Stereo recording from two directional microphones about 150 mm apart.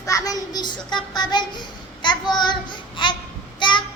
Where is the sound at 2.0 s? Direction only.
30° left (ahead or behind).